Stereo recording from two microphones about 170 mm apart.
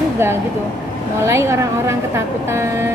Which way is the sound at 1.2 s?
15° right (ahead or behind).